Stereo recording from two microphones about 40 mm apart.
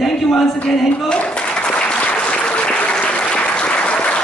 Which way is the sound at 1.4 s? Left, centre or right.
Left.